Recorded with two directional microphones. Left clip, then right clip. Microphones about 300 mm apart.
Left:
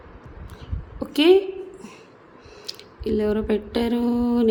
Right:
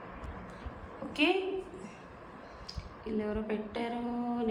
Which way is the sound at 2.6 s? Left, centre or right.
Left.